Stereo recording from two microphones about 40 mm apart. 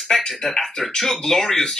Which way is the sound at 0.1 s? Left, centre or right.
Centre.